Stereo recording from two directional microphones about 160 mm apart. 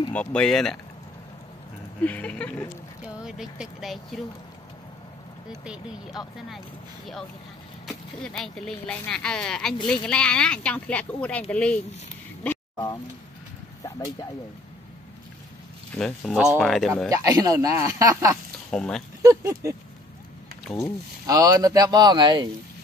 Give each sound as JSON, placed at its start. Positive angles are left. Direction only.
{"t": 0.1, "sound": "speech", "side_deg": 5}
{"t": 2.0, "sound": "speech", "side_deg": 10}
{"t": 3.2, "sound": "speech", "side_deg": -5}
{"t": 8.2, "sound": "speech", "side_deg": 5}
{"t": 12.7, "sound": "speech", "side_deg": 25}
{"t": 16.0, "sound": "speech", "side_deg": 5}
{"t": 17.2, "sound": "speech", "side_deg": -20}
{"t": 18.7, "sound": "speech", "side_deg": 5}
{"t": 19.2, "sound": "a sound", "side_deg": -20}
{"t": 21.3, "sound": "speech", "side_deg": -25}